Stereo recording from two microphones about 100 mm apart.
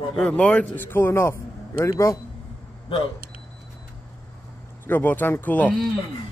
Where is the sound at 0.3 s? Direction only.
15° left (ahead or behind); by 2.1 s 30° left (ahead or behind).